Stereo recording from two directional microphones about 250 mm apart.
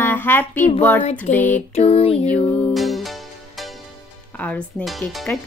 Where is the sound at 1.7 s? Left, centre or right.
Left.